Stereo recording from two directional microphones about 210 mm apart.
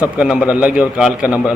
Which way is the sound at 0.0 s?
5° right (ahead or behind).